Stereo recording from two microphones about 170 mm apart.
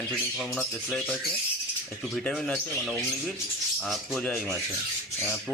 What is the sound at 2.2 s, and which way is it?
Speech, 5° left (ahead or behind).